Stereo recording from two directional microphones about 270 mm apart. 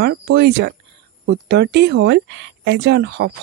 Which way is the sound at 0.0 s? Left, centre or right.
Right.